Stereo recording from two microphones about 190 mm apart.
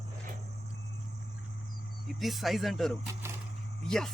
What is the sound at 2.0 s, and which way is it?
Speech, centre (ahead or behind).